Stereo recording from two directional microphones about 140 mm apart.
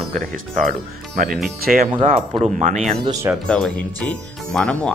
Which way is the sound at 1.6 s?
90° right.